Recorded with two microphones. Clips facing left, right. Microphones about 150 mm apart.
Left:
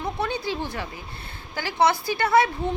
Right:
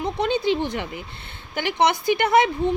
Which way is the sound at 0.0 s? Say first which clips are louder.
Right 5 dB; 20° right (ahead or behind).